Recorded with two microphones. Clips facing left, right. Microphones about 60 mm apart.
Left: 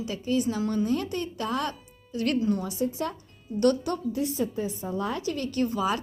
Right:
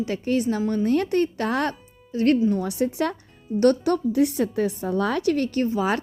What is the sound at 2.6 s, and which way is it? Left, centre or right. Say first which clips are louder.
Speech: right 5 dB; right.